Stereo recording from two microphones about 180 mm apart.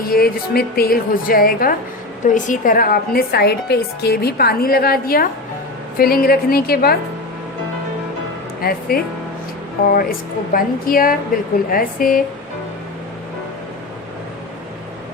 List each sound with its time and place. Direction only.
0.0 s a woman's voice: 55° left (ahead or behind)
8.9 s a woman's voice: 55° left (ahead or behind)